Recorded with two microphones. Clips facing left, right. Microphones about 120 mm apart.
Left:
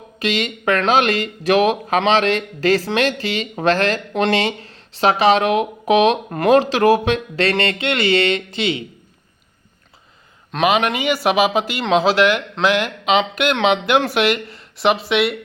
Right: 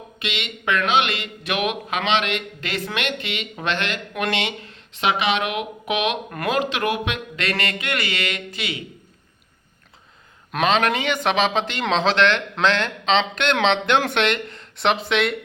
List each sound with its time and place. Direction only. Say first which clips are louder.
0.2 s speech: left 9 dB; 40° left (ahead or behind)
10.6 s speech: left 2 dB; 5° left (ahead or behind)